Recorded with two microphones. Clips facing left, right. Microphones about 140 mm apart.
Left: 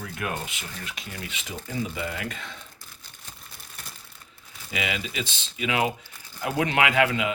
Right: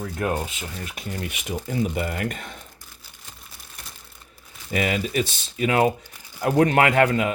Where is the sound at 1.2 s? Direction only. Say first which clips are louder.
Right 7 dB; 55° right (ahead or behind).